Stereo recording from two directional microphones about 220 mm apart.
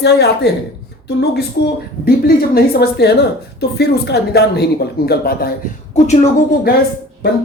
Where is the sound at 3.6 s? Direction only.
45° left (ahead or behind).